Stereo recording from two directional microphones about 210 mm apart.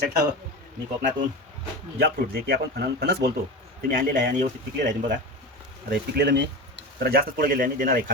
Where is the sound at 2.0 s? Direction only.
45° right (ahead or behind).